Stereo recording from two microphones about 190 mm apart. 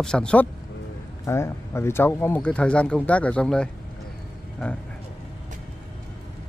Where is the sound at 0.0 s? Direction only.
5° left (ahead or behind).